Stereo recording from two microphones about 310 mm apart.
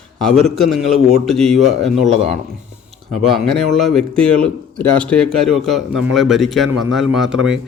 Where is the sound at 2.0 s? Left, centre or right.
Centre.